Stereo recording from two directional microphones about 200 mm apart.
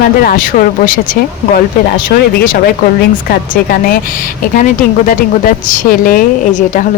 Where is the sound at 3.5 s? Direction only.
45° left (ahead or behind).